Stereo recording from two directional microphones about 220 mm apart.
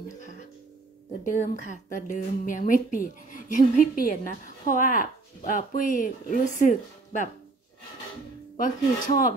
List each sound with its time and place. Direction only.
1.2 s a woman's voice: 35° left (ahead or behind)
8.5 s a woman's voice: 40° left (ahead or behind)